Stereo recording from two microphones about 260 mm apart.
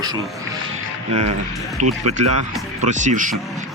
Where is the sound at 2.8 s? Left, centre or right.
Right.